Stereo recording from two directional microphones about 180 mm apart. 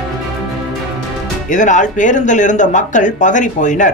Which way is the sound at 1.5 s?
45° left (ahead or behind).